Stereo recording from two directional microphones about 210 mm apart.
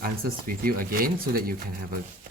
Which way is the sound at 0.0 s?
45° right (ahead or behind).